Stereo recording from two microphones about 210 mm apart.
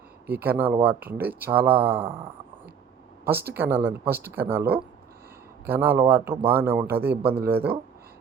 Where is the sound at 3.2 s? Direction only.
10° right (ahead or behind).